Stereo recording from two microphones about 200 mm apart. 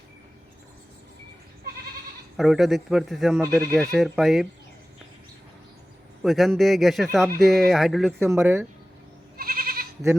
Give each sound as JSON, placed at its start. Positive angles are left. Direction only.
{"t": 2.3, "sound": "speech", "side_deg": 0}
{"t": 6.2, "sound": "speech", "side_deg": 0}
{"t": 8.2, "sound": "speech", "side_deg": -10}
{"t": 9.4, "sound": "goat", "side_deg": -45}